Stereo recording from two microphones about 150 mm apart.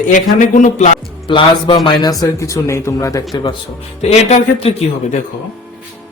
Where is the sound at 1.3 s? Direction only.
35° left (ahead or behind).